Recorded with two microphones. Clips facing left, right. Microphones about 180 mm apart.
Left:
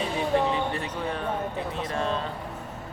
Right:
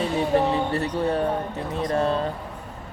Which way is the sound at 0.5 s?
35° right (ahead or behind).